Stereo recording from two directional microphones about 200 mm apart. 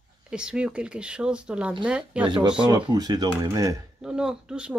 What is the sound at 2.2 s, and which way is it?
Speech, 25° right (ahead or behind).